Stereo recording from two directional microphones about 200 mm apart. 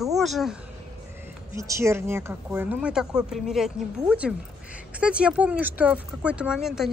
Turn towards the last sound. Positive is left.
turn(degrees=0)  # may be behind; listen again after turning